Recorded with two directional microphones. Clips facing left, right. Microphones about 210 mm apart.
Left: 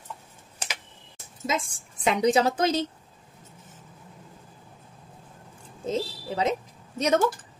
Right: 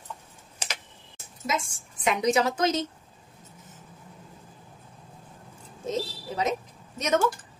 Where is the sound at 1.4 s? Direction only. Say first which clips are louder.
Left 1 dB; 30° left (ahead or behind).